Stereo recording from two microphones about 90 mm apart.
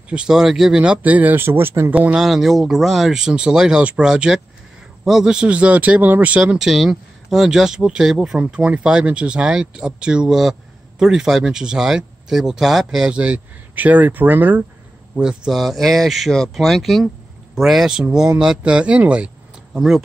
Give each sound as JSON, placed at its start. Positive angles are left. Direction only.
{"t": 0.1, "sound": "speech", "side_deg": -10}
{"t": 2.2, "sound": "speech", "side_deg": 0}
{"t": 15.1, "sound": "speech", "side_deg": -10}